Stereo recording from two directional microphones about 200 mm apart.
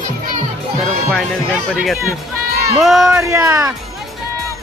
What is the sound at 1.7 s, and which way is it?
Speech, centre (ahead or behind).